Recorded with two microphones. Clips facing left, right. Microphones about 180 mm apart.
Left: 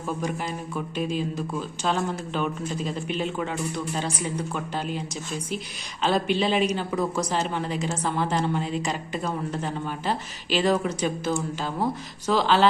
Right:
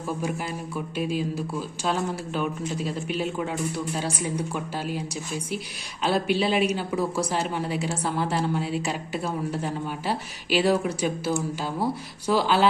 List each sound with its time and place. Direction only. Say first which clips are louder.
0.9 s speech: right 1 dB; 5° right (ahead or behind)